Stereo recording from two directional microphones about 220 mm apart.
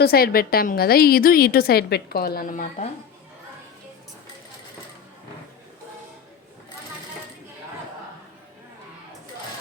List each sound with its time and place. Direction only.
0.0 s a woman's voice: 45° left (ahead or behind)